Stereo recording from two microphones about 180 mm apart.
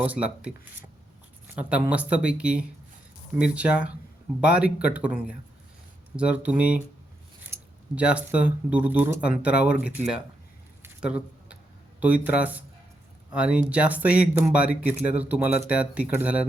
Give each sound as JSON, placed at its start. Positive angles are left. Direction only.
{"t": 0.0, "sound": "speech", "side_deg": -5}
{"t": 1.6, "sound": "speech", "side_deg": -10}
{"t": 10.8, "sound": "squish", "side_deg": -5}
{"t": 11.9, "sound": "speech", "side_deg": -10}